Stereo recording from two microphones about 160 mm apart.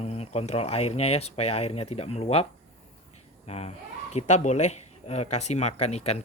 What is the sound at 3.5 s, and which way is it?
Speech, 40° left (ahead or behind).